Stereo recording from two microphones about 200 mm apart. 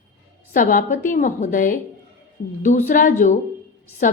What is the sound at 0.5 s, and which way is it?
A woman's voice, 40° left (ahead or behind).